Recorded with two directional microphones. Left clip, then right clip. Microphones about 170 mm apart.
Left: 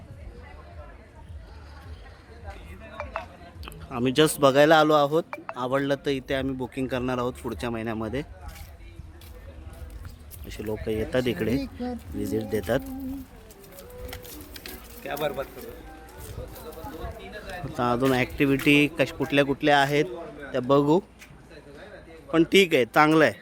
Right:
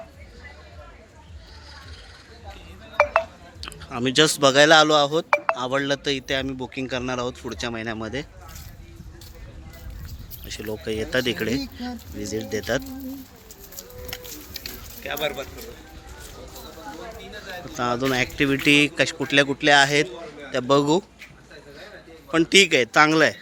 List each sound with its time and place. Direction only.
3.0 s a sound: 65° right (ahead or behind)
3.6 s a man's voice: 5° left (ahead or behind)
10.5 s a man's voice: 5° left (ahead or behind)
14.1 s a sound: 15° left (ahead or behind)
15.0 s speech: 45° left (ahead or behind)
17.7 s speech: 25° left (ahead or behind)
18.3 s a man's voice: centre (ahead or behind)
22.3 s a man's voice: 10° left (ahead or behind)